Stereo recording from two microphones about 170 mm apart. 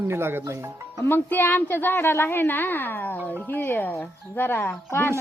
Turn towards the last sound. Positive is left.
turn(degrees=15)  # may be behind; listen again after turning